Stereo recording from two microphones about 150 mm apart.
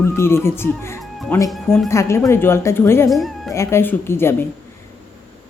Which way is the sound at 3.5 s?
15° left (ahead or behind).